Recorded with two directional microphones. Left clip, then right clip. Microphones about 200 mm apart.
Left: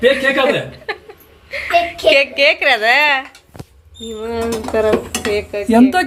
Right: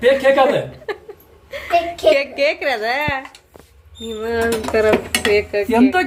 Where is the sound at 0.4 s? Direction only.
10° right (ahead or behind).